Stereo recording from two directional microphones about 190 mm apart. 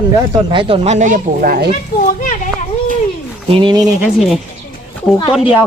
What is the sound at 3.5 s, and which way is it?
Speech, 25° right (ahead or behind).